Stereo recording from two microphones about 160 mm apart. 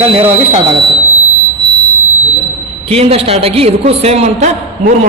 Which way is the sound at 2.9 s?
40° right (ahead or behind).